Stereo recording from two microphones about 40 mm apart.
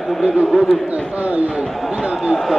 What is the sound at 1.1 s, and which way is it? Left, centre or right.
Speech, right.